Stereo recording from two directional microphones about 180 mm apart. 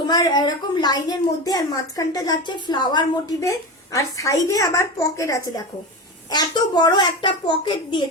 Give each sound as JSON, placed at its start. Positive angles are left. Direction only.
{"t": 0.1, "sound": "a woman's voice", "side_deg": 25}